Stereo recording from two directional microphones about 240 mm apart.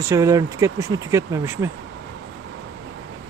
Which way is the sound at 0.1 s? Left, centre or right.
Centre.